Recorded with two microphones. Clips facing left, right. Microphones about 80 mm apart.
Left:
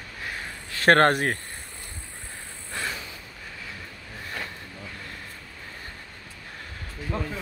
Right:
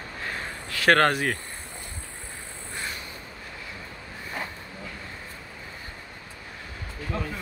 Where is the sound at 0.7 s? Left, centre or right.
Left.